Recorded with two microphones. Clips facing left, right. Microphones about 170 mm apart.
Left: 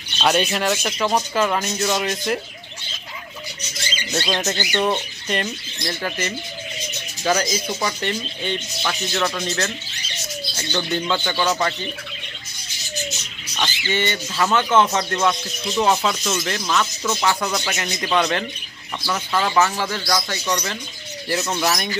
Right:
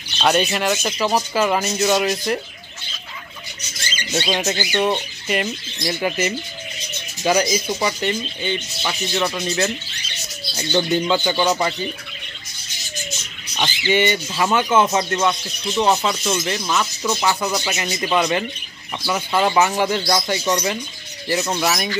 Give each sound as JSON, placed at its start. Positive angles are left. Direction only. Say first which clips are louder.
{"t": 0.2, "sound": "speech", "louder": "right 1 dB", "side_deg": 0}
{"t": 4.1, "sound": "speech", "louder": "right 2 dB", "side_deg": 0}
{"t": 10.5, "sound": "speech", "louder": "right 6 dB", "side_deg": -15}
{"t": 13.6, "sound": "speech", "louder": "right 5 dB", "side_deg": -15}
{"t": 17.0, "sound": "speech", "louder": "right 1 dB", "side_deg": -15}
{"t": 17.3, "sound": "speech", "louder": "right 1 dB", "side_deg": -5}